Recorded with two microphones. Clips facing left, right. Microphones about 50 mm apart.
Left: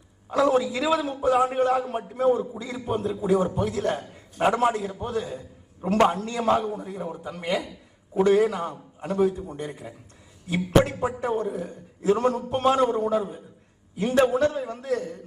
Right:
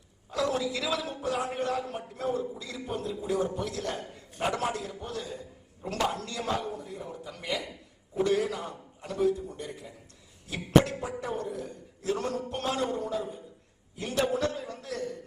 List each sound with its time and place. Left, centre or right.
0.3 s a man's voice: left